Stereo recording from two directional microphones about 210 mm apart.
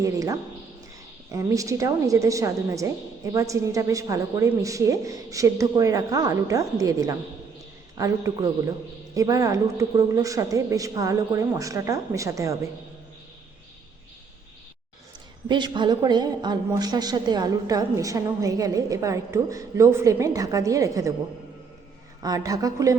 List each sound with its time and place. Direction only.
0.0 s a woman's voice: 15° right (ahead or behind)
15.4 s a woman's voice: 20° right (ahead or behind)
22.2 s a woman's voice: 15° right (ahead or behind)